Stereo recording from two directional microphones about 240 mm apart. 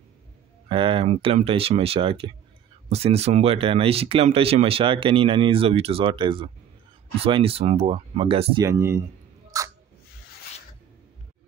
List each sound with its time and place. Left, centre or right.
0.7 s speech: right
8.6 s speech: centre
9.5 s a sound: centre